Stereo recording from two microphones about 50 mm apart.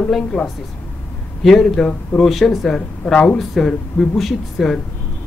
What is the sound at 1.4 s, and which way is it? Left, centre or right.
A woman's voice, centre.